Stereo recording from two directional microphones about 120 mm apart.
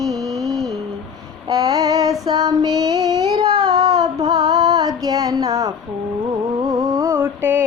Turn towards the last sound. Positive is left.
turn(degrees=-20)  # may be behind; listen again after turning